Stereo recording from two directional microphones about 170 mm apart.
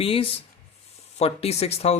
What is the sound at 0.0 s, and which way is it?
Speech, 35° left (ahead or behind).